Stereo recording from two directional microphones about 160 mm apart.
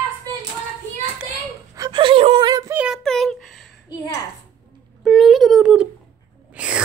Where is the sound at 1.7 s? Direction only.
25° right (ahead or behind).